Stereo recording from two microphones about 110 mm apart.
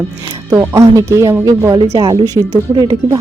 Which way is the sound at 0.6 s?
30° right (ahead or behind).